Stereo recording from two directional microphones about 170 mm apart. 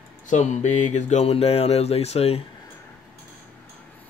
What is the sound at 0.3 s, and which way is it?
Speech, 45° left (ahead or behind).